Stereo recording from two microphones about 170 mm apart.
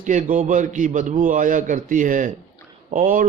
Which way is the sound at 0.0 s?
50° right (ahead or behind).